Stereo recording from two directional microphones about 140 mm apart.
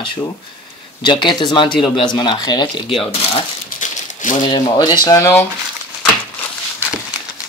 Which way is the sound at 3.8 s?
65° left (ahead or behind).